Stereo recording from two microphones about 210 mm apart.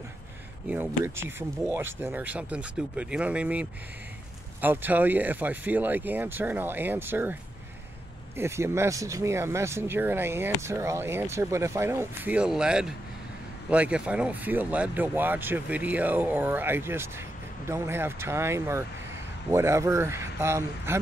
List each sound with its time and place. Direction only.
0.7 s speech: 10° right (ahead or behind)
8.4 s speech: 10° right (ahead or behind)